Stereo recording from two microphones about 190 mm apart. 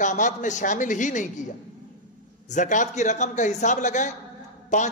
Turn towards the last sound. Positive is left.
turn(degrees=40)  # may be behind; listen again after turning